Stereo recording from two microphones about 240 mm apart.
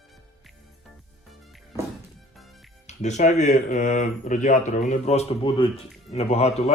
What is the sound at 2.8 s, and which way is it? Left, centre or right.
Speech, left.